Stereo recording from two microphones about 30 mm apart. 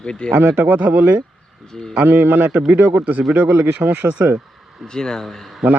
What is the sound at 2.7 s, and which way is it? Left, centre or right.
Speech, right.